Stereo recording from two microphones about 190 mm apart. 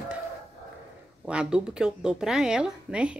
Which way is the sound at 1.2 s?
5° right (ahead or behind).